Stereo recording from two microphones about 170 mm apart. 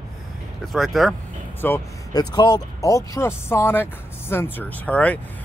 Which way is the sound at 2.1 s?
25° left (ahead or behind).